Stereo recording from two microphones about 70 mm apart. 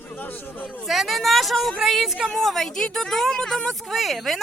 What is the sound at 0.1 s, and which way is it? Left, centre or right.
Speech, left.